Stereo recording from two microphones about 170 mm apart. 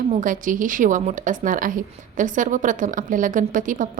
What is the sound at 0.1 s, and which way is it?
Speech, 50° right (ahead or behind).